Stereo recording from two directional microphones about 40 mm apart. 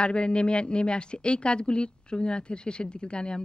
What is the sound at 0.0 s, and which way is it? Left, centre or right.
Speech, left.